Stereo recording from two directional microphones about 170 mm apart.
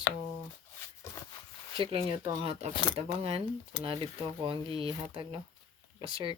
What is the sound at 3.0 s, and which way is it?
Speech, 35° right (ahead or behind).